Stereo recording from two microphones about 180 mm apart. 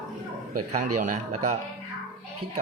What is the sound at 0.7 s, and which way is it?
Speech, 45° right (ahead or behind).